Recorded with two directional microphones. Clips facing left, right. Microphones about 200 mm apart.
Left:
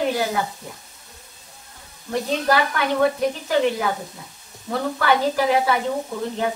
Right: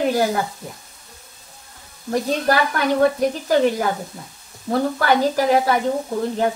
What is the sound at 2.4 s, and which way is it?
A woman's voice, 40° right (ahead or behind).